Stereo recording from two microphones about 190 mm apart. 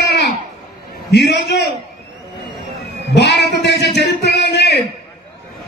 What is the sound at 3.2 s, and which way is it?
Music, 65° left (ahead or behind).